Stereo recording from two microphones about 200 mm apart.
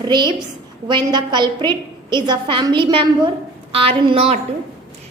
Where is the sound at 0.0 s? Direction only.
20° right (ahead or behind).